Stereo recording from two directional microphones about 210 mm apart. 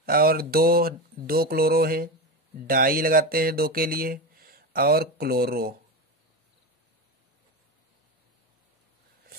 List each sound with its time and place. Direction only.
0.0 s speech: 45° right (ahead or behind)